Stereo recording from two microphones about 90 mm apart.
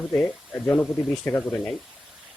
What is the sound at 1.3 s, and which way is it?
Speech, 15° left (ahead or behind).